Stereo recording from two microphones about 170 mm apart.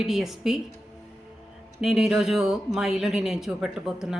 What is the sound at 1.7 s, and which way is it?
Speech, 5° right (ahead or behind).